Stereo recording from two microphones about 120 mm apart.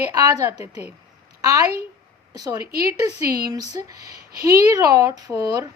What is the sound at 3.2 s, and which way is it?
Speech, 30° right (ahead or behind).